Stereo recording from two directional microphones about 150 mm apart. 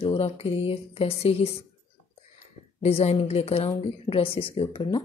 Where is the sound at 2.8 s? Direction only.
45° left (ahead or behind).